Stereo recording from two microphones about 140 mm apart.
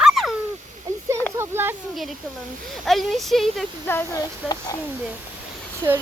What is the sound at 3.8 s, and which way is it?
Speech, 15° left (ahead or behind).